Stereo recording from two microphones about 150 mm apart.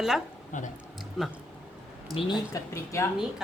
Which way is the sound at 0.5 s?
55° left (ahead or behind).